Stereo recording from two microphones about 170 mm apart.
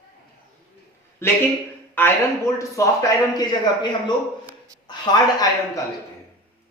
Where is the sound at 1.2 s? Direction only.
15° left (ahead or behind).